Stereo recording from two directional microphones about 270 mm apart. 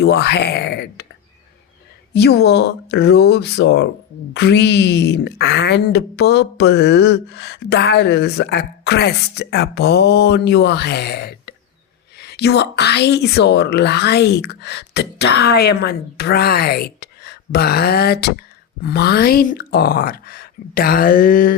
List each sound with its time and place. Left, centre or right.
0.0 s speech: left
2.1 s speech: left